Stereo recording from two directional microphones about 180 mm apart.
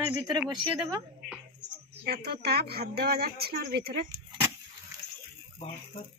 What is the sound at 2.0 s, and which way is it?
A woman's voice, 65° right (ahead or behind).